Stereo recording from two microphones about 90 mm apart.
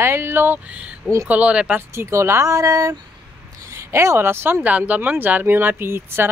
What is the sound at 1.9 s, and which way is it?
Speech, 30° right (ahead or behind).